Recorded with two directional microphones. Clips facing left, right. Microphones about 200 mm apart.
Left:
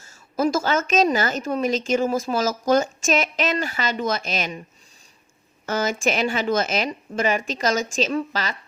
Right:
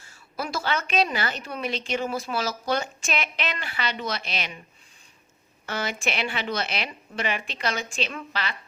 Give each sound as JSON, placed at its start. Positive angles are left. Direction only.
{"t": 0.0, "sound": "a woman's voice", "side_deg": 45}
{"t": 5.6, "sound": "a woman's voice", "side_deg": 45}